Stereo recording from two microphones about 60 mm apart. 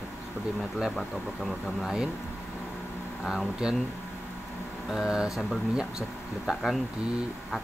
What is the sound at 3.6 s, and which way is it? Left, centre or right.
Speech, centre.